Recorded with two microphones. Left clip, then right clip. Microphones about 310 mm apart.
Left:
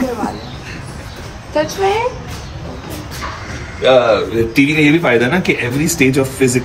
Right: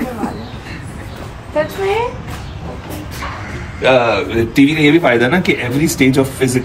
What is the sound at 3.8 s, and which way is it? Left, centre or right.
Speech, right.